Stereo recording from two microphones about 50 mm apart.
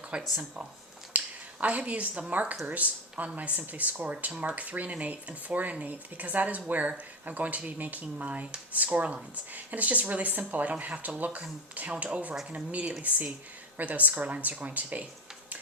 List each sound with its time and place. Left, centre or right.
0.1 s speech: centre
1.1 s a sound: right
1.6 s a woman's voice: right